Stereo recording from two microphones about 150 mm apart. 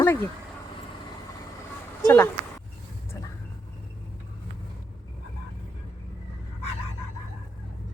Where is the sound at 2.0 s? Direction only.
15° left (ahead or behind).